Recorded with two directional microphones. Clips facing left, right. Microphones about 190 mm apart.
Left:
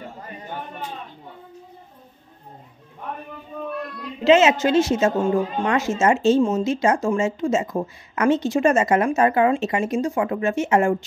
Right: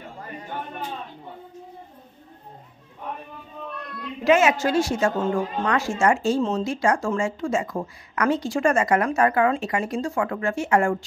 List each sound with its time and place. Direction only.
4.2 s a woman's voice: 25° left (ahead or behind)